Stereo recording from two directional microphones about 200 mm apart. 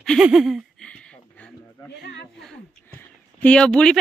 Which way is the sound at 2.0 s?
60° left (ahead or behind).